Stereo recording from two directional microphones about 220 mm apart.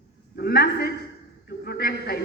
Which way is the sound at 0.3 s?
45° left (ahead or behind).